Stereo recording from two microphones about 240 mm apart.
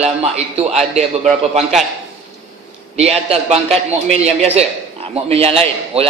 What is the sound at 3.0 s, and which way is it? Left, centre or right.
Speech, right.